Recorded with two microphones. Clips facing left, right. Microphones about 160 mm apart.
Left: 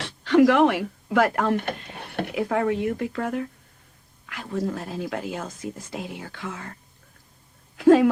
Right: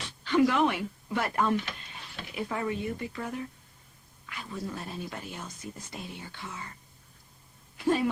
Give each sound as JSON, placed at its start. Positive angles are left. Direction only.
{"t": 0.0, "sound": "speech", "side_deg": 70}
{"t": 4.3, "sound": "speech", "side_deg": 90}
{"t": 7.8, "sound": "speech", "side_deg": 90}